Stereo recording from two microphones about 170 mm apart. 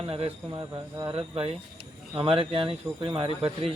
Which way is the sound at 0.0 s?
35° right (ahead or behind).